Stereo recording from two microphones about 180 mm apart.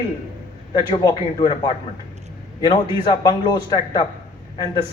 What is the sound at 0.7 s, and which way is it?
A man's voice, 25° left (ahead or behind).